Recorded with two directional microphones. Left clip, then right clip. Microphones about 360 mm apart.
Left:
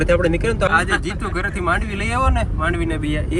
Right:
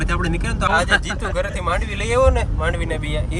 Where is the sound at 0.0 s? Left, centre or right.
Centre.